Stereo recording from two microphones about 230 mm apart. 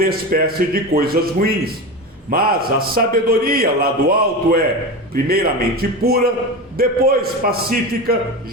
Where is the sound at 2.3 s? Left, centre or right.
Right.